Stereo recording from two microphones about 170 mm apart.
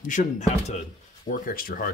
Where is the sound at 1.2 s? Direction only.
55° left (ahead or behind).